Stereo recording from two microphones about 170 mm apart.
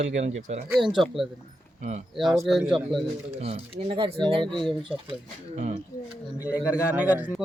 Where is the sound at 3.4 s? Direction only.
35° right (ahead or behind).